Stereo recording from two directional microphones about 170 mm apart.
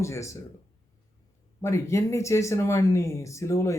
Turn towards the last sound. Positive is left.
turn(degrees=15)  # may be behind; listen again after turning